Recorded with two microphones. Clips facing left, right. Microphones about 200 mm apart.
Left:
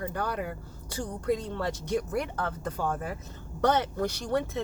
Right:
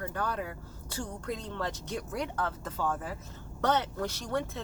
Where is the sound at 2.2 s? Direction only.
15° left (ahead or behind).